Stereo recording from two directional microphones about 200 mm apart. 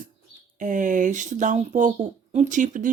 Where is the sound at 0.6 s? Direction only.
40° right (ahead or behind).